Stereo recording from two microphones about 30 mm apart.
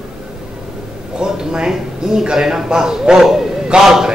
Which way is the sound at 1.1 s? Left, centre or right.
Right.